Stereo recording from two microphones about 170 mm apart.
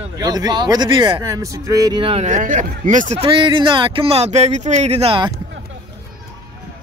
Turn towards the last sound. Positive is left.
turn(degrees=-35)  # may be behind; listen again after turning